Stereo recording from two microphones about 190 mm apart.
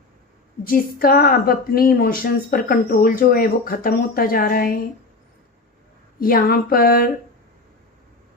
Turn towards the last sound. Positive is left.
turn(degrees=50)  # may be behind; listen again after turning